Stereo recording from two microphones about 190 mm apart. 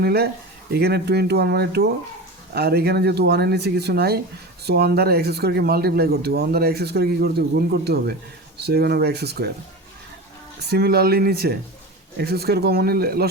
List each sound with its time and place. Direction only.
0.0 s speech: 55° right (ahead or behind)
10.6 s speech: 55° right (ahead or behind)